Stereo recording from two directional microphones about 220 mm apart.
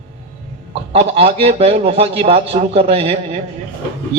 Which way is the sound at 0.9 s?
25° right (ahead or behind).